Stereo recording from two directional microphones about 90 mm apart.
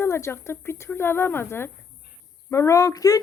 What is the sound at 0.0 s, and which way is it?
Speech, 30° left (ahead or behind).